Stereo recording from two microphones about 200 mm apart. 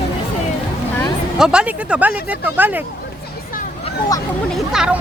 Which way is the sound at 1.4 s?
5° right (ahead or behind).